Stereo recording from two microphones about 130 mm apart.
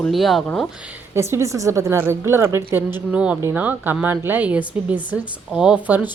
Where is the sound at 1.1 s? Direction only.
20° right (ahead or behind).